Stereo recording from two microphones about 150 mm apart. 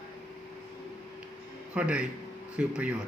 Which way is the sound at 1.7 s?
10° right (ahead or behind).